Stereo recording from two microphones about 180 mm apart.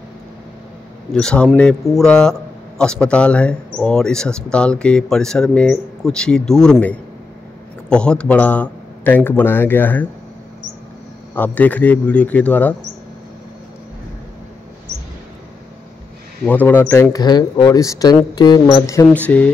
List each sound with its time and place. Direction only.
1.1 s speech: 5° left (ahead or behind)
11.3 s speech: 10° left (ahead or behind)
16.4 s speech: 10° left (ahead or behind)